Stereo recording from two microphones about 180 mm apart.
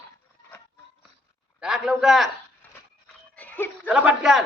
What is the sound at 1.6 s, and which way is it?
Speech, 5° right (ahead or behind).